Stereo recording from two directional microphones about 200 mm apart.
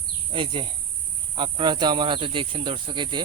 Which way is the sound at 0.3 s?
25° right (ahead or behind).